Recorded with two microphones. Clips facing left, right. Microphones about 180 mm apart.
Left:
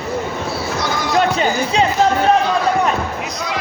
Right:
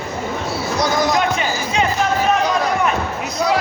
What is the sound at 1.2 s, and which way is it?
Music, 35° left (ahead or behind).